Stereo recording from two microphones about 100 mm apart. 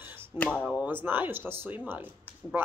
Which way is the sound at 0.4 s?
15° left (ahead or behind).